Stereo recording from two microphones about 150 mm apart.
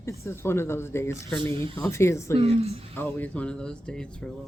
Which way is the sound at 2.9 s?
10° left (ahead or behind).